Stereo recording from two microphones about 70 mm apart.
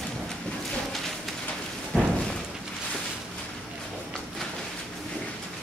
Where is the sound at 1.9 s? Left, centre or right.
Centre.